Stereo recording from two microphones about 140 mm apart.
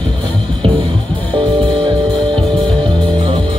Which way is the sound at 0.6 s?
35° right (ahead or behind).